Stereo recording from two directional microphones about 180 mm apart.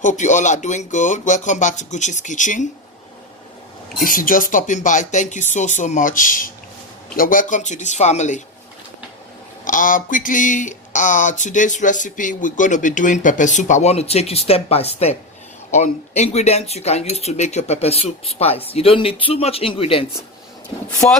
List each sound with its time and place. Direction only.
0.0 s speech: 45° left (ahead or behind)
4.0 s speech: 50° left (ahead or behind)
9.6 s speech: 50° left (ahead or behind); by 20.1 s 30° left (ahead or behind)
21.0 s speech: 10° left (ahead or behind)